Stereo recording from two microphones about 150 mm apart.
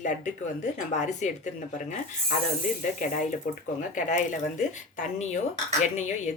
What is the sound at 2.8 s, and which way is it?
Speech, 60° left (ahead or behind).